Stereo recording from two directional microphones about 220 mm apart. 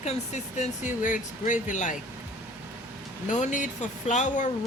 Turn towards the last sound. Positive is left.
turn(degrees=35)  # may be behind; listen again after turning